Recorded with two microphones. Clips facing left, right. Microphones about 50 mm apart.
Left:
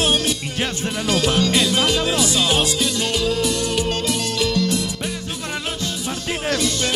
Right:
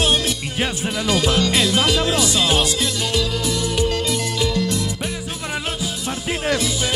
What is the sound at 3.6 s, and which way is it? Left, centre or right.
Music, left.